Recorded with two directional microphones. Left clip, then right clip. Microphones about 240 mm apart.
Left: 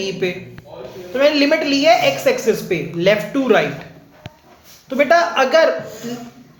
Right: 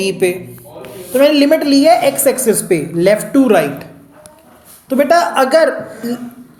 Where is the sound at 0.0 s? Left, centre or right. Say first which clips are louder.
Right 7 dB; right.